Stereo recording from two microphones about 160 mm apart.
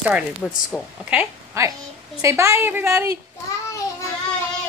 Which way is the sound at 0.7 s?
5° left (ahead or behind).